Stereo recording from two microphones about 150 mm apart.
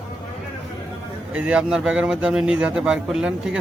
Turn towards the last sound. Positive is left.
turn(degrees=-5)  # may be behind; listen again after turning